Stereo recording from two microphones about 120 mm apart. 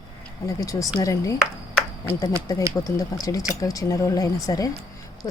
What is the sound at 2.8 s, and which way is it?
Speech, 30° left (ahead or behind).